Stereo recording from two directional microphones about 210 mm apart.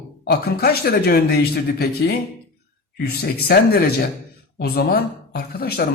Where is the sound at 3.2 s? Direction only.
45° left (ahead or behind).